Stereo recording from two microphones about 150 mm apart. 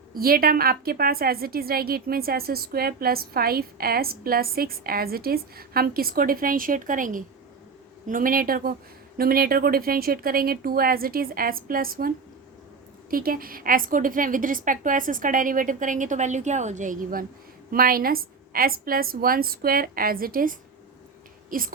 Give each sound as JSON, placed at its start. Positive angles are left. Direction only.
{"t": 0.1, "sound": "a woman's voice", "side_deg": -75}